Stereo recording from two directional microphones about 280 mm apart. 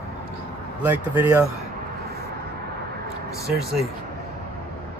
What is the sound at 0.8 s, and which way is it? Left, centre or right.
Speech, centre.